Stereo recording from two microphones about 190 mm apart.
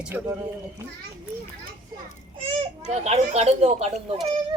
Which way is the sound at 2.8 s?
35° right (ahead or behind).